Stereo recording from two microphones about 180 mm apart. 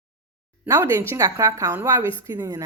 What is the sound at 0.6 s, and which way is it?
A woman's voice, 15° right (ahead or behind).